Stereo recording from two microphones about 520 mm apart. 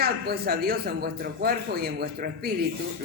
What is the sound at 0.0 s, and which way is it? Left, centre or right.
Speech, centre.